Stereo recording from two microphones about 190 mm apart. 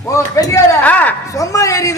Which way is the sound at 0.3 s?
15° left (ahead or behind).